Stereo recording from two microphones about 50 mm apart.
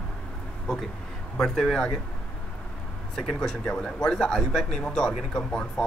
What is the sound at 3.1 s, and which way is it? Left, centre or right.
Speech, centre.